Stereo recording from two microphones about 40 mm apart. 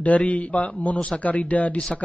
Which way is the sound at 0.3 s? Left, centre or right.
Left.